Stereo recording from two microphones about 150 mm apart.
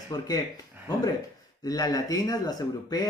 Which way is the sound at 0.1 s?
25° left (ahead or behind).